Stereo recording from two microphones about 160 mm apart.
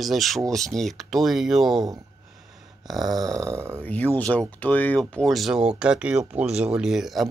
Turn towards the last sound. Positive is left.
turn(degrees=0)  # may be behind; listen again after turning